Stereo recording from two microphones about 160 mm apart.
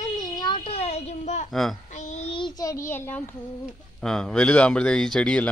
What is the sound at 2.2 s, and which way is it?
Child singing, 30° left (ahead or behind).